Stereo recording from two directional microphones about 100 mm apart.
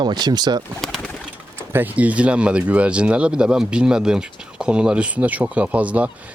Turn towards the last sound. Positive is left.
turn(degrees=-15)  # may be behind; listen again after turning